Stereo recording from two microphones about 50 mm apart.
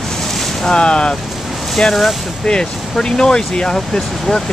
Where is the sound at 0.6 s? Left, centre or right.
Centre.